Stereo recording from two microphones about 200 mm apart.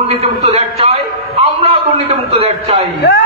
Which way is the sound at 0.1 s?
30° right (ahead or behind).